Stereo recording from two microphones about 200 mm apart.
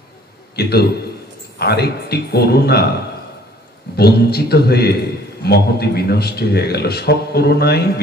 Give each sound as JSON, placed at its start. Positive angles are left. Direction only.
{"t": 0.6, "sound": "a man's voice", "side_deg": 55}
{"t": 3.9, "sound": "a man's voice", "side_deg": 50}